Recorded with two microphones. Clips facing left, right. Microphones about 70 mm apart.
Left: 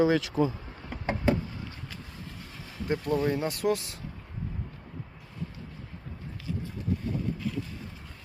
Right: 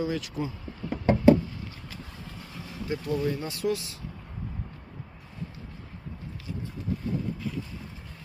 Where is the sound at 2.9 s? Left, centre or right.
Left.